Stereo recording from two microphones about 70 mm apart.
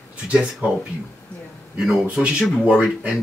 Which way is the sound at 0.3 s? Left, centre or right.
Centre.